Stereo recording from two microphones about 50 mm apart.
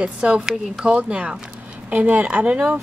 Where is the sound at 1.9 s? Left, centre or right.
Right.